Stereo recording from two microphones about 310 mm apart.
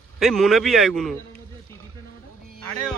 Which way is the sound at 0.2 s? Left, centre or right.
Centre.